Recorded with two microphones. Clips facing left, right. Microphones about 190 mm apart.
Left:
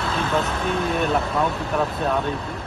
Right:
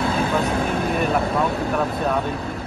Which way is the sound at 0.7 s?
55° right (ahead or behind).